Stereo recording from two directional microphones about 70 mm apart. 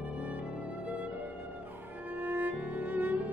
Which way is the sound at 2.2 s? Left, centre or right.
Right.